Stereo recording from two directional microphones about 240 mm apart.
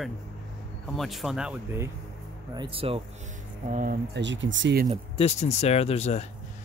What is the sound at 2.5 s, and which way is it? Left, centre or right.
Speech, centre.